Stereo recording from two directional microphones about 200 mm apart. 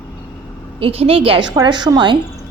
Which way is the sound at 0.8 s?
30° right (ahead or behind).